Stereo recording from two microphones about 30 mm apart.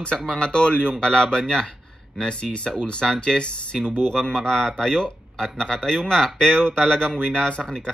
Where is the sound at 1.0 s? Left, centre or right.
Left.